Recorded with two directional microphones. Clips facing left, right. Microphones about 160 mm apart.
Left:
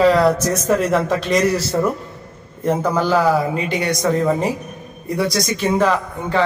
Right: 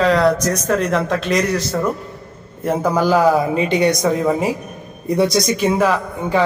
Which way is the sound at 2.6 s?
10° right (ahead or behind).